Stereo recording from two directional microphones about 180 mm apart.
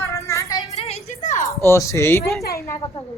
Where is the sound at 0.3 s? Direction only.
15° left (ahead or behind).